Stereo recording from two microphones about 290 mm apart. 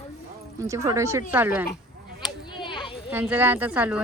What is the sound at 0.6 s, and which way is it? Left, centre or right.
Speech, centre.